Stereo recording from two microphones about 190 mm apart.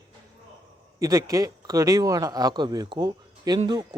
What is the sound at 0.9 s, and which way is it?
Speech, 15° right (ahead or behind).